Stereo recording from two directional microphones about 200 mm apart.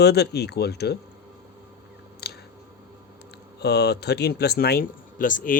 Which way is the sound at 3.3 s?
55° left (ahead or behind).